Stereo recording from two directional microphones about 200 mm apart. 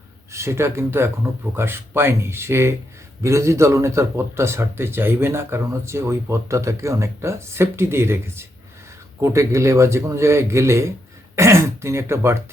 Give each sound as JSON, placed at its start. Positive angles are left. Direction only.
{"t": 0.3, "sound": "speech", "side_deg": -15}